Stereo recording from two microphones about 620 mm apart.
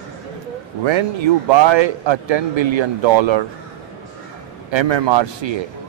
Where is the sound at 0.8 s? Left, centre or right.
Right.